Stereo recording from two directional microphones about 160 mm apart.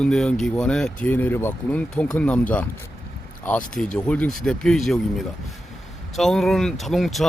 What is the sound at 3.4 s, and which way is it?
Speech, 10° left (ahead or behind).